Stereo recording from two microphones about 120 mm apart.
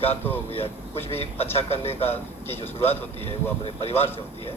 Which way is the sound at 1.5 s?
55° left (ahead or behind).